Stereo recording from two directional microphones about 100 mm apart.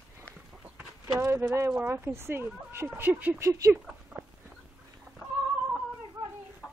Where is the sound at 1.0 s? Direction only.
25° right (ahead or behind).